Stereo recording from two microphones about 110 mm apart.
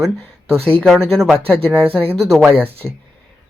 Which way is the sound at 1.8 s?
20° right (ahead or behind).